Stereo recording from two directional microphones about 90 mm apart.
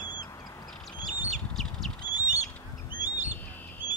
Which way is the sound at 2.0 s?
45° left (ahead or behind).